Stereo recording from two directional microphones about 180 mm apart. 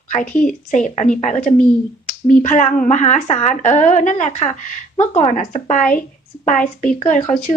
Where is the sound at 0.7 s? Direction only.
45° left (ahead or behind).